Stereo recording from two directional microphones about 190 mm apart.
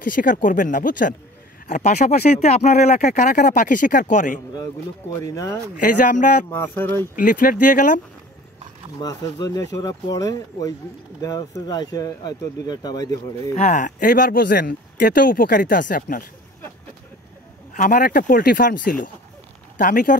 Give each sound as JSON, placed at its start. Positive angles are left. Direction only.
{"t": 0.0, "sound": "speech", "side_deg": 45}
{"t": 5.3, "sound": "speech", "side_deg": 15}
{"t": 5.8, "sound": "speech", "side_deg": 45}
{"t": 6.5, "sound": "speech", "side_deg": 10}
{"t": 7.2, "sound": "speech", "side_deg": 45}
{"t": 9.0, "sound": "speech", "side_deg": 20}
{"t": 13.6, "sound": "speech", "side_deg": 40}
{"t": 17.7, "sound": "speech", "side_deg": 45}